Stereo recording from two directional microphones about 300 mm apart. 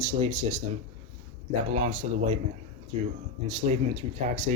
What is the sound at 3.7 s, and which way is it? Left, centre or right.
Speech, right.